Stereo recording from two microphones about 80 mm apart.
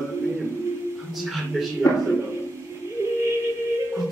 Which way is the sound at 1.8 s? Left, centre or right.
Centre.